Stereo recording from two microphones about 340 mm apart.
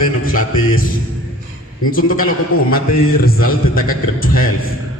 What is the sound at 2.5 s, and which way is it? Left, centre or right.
Mantra, left.